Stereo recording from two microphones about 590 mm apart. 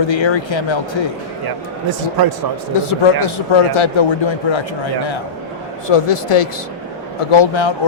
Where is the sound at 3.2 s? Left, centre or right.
Left.